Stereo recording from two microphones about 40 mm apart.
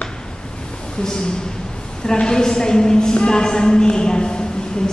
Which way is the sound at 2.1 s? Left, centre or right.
Centre.